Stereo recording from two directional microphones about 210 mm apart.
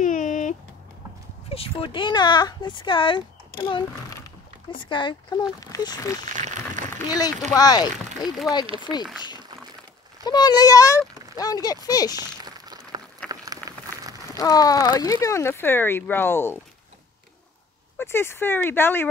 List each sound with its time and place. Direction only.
0.0 s a sound: 35° left (ahead or behind)
1.5 s speech: 25° left (ahead or behind)
4.8 s speech: 20° left (ahead or behind)
6.3 s speech: 35° right (ahead or behind)
7.1 s speech: 15° left (ahead or behind)
8.2 s speech: centre (ahead or behind)
10.2 s speech: 20° left (ahead or behind)
11.0 s a sound: 15° right (ahead or behind)
11.3 s speech: 15° left (ahead or behind)
12.2 s a sound: 20° right (ahead or behind)
14.3 s speech: 15° left (ahead or behind)
17.9 s speech: 10° left (ahead or behind)